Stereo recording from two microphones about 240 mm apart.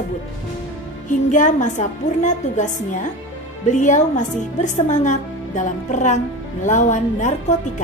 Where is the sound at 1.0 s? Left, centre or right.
Left.